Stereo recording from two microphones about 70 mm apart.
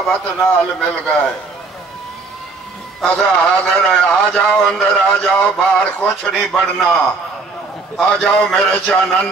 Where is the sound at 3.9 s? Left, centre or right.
Centre.